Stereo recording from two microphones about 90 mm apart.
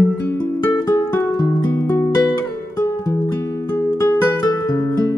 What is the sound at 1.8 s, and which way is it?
Music, 25° left (ahead or behind).